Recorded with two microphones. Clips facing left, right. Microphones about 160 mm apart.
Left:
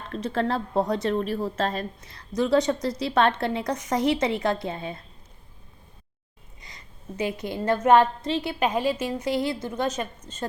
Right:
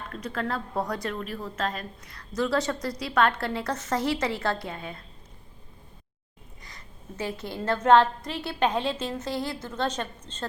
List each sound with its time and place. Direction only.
0.1 s a woman's voice: 30° left (ahead or behind)
6.6 s a woman's voice: 20° left (ahead or behind)
8.2 s a woman's voice: 25° left (ahead or behind)
8.5 s a woman's voice: 10° left (ahead or behind)